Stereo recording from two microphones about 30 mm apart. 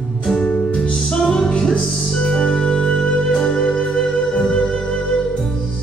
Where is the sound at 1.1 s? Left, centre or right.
Left.